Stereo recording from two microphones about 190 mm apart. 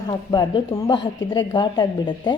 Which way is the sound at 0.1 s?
20° left (ahead or behind).